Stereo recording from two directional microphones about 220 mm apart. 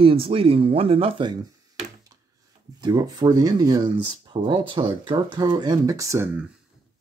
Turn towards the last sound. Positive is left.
turn(degrees=-15)  # may be behind; listen again after turning